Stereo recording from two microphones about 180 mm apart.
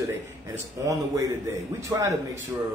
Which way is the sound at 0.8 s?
20° right (ahead or behind).